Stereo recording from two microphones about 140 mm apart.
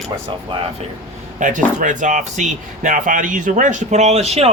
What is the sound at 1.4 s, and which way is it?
A man's voice, 65° right (ahead or behind).